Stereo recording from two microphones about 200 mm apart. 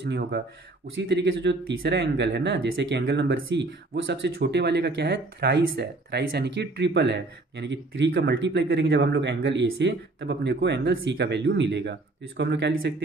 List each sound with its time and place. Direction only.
0.1 s speech: 55° right (ahead or behind)